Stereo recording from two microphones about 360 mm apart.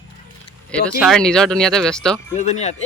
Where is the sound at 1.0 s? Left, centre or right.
Centre.